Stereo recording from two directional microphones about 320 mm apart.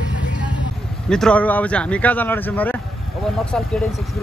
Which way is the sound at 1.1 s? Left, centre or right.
Centre.